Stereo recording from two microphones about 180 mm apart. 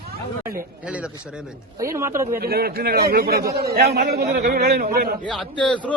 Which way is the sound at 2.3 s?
60° right (ahead or behind).